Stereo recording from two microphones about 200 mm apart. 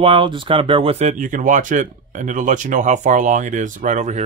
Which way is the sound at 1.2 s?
40° right (ahead or behind).